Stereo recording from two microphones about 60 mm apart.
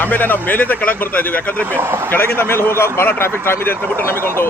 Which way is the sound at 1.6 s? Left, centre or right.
Right.